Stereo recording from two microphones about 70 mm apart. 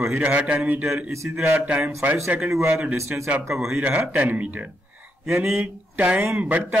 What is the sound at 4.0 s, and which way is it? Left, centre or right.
Speech, right.